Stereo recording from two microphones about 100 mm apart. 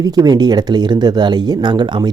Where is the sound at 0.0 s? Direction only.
40° right (ahead or behind).